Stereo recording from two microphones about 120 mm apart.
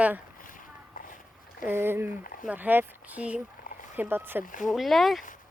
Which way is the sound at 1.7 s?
20° right (ahead or behind).